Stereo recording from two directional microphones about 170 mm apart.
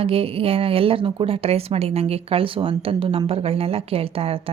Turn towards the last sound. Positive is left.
turn(degrees=-35)  # may be behind; listen again after turning